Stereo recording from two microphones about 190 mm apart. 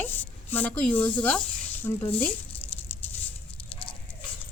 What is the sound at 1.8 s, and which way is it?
Rattle, 10° left (ahead or behind).